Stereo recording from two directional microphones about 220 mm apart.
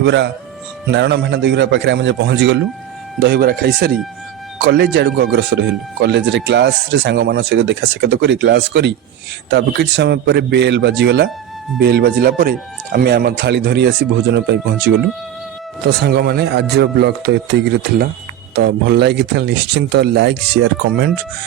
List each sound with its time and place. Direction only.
0.0 s speech: 50° right (ahead or behind)